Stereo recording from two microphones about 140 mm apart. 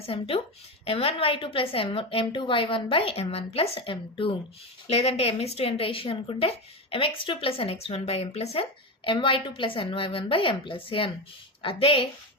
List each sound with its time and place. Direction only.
0.0 s a woman's voice: 40° left (ahead or behind)